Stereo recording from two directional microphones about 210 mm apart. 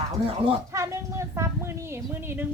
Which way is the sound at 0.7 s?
15° right (ahead or behind).